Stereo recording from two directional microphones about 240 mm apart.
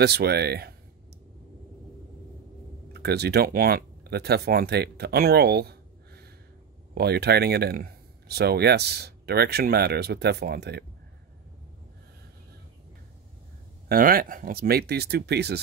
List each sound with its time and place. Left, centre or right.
0.0 s speech: right
2.9 s speech: right
13.8 s speech: right